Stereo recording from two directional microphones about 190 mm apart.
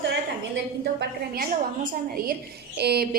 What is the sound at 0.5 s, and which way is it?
Speech, 60° right (ahead or behind).